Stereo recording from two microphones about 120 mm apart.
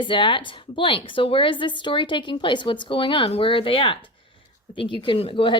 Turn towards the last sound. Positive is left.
turn(degrees=50)  # may be behind; listen again after turning